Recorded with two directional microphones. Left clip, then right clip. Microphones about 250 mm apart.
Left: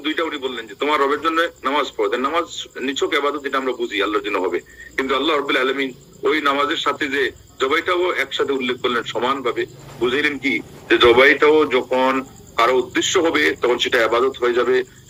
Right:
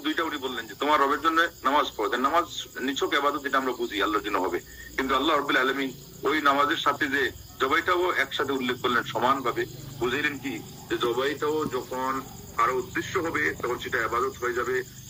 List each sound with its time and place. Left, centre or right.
0.0 s a man's voice: centre; by 11.9 s left
11.9 s speech: left